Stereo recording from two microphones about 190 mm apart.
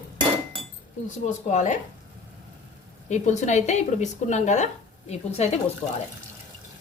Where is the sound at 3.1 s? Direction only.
40° left (ahead or behind).